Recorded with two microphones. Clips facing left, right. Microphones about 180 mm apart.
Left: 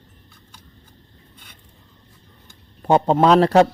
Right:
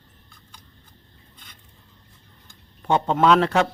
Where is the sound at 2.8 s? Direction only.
35° left (ahead or behind).